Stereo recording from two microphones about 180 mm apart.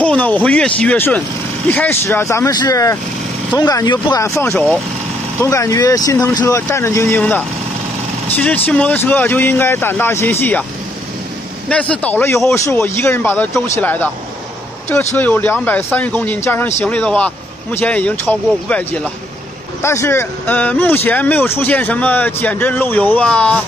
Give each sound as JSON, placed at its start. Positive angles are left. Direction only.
{"t": 0.0, "sound": "speech", "side_deg": 10}
{"t": 11.7, "sound": "speech", "side_deg": 10}
{"t": 15.1, "sound": "speech", "side_deg": 10}